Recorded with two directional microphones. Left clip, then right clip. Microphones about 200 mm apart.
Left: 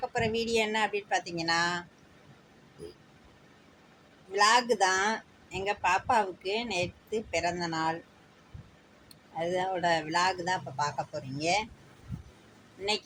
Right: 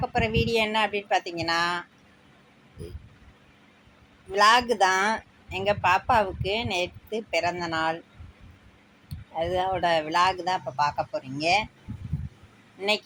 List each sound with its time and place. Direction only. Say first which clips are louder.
0.0 s speech: right 5 dB; 15° right (ahead or behind)
4.3 s speech: right 5 dB; 15° right (ahead or behind)
9.4 s speech: right 4 dB; 15° right (ahead or behind)